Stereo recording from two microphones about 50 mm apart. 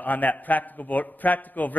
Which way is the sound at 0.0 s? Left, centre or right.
Left.